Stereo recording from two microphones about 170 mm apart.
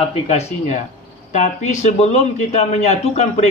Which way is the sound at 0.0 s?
35° left (ahead or behind).